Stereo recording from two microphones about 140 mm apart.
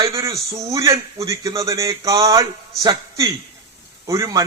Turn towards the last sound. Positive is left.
turn(degrees=-25)  # may be behind; listen again after turning